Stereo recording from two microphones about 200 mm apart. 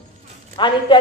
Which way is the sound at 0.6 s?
25° left (ahead or behind).